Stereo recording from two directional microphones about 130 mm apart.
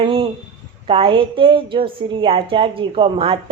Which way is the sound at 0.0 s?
40° right (ahead or behind).